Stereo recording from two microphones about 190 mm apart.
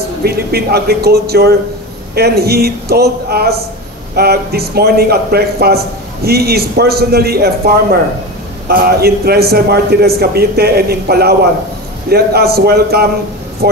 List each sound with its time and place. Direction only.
0.2 s a man's voice: 55° right (ahead or behind)